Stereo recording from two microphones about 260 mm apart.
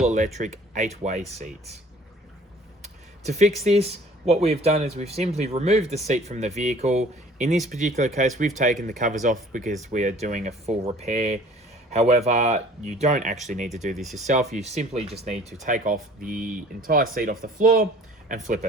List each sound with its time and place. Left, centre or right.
0.0 s speech: right
2.8 s speech: right
13.9 s speech: centre
14.3 s speech: right